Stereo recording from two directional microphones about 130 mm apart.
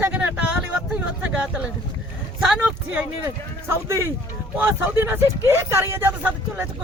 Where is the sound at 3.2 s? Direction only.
20° right (ahead or behind).